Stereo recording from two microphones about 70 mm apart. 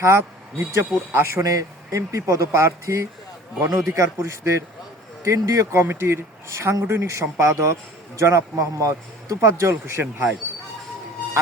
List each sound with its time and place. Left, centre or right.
0.0 s a man's voice: right
1.4 s a man's voice: right
5.8 s a man's voice: right